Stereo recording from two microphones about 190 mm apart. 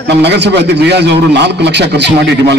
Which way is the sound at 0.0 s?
65° right (ahead or behind).